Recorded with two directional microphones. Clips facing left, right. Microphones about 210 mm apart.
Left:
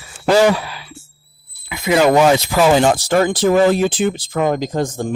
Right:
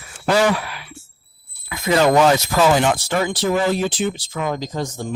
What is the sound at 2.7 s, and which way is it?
Speech, 35° left (ahead or behind).